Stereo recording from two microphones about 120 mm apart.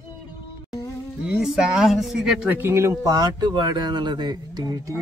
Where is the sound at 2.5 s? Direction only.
20° right (ahead or behind).